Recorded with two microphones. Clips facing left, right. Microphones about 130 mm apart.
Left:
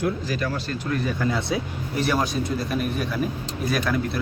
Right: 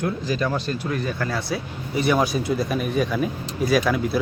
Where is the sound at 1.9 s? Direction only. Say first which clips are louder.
Right 3 dB; centre (ahead or behind).